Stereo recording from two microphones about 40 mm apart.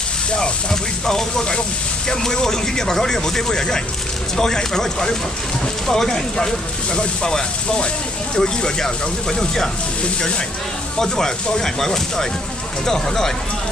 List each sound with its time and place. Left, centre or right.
0.3 s speech: centre
11.0 s speech: centre